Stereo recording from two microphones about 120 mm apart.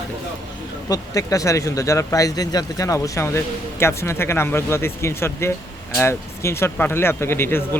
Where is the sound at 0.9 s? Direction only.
30° left (ahead or behind).